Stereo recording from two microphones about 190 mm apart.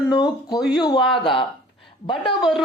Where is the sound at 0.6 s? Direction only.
5° right (ahead or behind).